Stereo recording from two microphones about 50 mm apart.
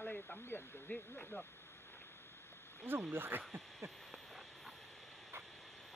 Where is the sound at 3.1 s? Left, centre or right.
Right.